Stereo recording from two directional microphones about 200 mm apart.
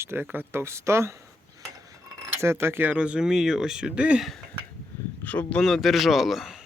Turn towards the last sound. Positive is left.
turn(degrees=0)  # may be behind; listen again after turning